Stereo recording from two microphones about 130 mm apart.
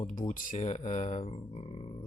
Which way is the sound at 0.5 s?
60° left (ahead or behind).